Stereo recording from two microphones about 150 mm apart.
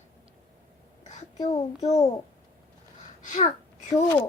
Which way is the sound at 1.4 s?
45° left (ahead or behind).